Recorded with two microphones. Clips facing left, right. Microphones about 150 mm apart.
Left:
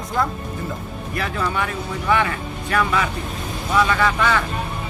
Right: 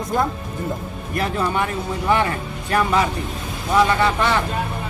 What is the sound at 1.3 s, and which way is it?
A man's voice, 25° right (ahead or behind).